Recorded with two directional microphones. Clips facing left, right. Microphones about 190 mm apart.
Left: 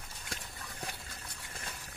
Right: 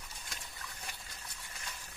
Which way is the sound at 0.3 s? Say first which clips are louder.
Left 6 dB; 55° left (ahead or behind).